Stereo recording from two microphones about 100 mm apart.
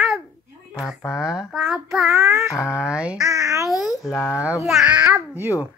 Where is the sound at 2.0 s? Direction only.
25° right (ahead or behind).